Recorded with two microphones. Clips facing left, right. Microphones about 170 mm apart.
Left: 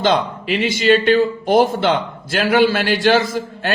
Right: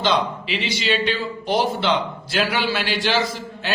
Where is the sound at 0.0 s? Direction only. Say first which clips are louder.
Left 4 dB; 50° left (ahead or behind).